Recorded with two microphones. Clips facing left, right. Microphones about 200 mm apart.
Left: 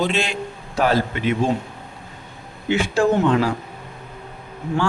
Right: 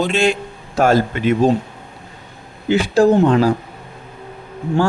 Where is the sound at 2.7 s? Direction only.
35° right (ahead or behind).